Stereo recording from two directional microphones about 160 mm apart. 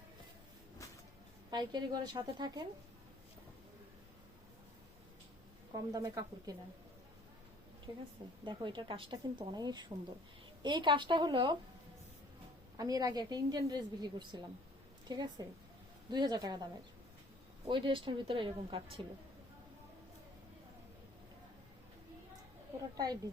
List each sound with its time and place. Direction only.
1.5 s a woman's voice: 25° right (ahead or behind)
5.7 s a woman's voice: 25° right (ahead or behind)
7.9 s a woman's voice: 25° right (ahead or behind)
12.7 s a woman's voice: 20° right (ahead or behind)
17.7 s a woman's voice: 30° right (ahead or behind)